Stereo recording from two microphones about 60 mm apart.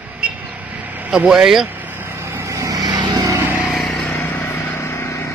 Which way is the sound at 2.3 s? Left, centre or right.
Right.